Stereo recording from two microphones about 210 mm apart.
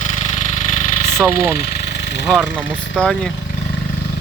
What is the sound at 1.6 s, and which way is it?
Engine, 50° left (ahead or behind).